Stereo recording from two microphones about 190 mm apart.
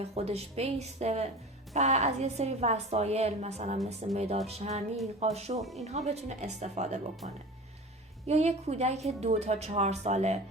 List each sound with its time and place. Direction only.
0.0 s a woman's voice: 35° right (ahead or behind)
8.3 s a woman's voice: 35° right (ahead or behind)